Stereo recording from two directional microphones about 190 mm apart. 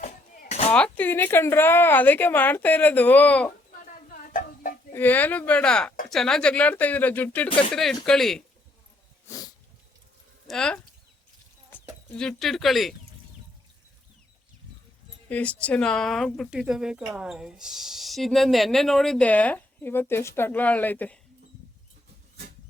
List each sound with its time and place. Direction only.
0.7 s a woman's voice: 10° left (ahead or behind)
3.8 s a sound: 45° left (ahead or behind)
4.9 s a woman's voice: 10° left (ahead or behind)
9.2 s dog: 20° left (ahead or behind)
10.4 s speech: centre (ahead or behind)
15.3 s speech: 5° left (ahead or behind)